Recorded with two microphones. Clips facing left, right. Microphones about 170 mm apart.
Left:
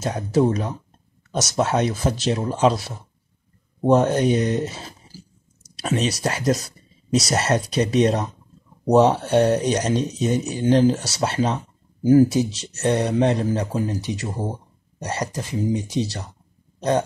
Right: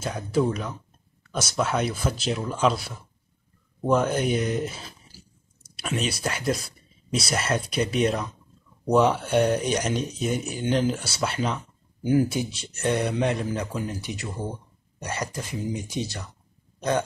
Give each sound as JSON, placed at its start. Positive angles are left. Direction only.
{"t": 0.0, "sound": "speech", "side_deg": 25}
{"t": 1.6, "sound": "speech", "side_deg": 25}